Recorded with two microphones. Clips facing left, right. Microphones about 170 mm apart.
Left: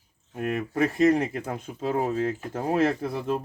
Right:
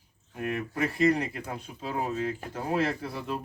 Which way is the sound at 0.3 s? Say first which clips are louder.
Left 5 dB; 45° left (ahead or behind).